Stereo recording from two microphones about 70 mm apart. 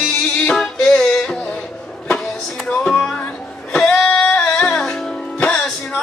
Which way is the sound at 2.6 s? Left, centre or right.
Centre.